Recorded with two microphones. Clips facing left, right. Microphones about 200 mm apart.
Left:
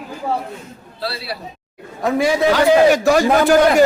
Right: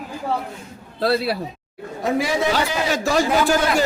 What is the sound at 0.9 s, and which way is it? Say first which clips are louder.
Speech: right 7 dB; 50° right (ahead or behind).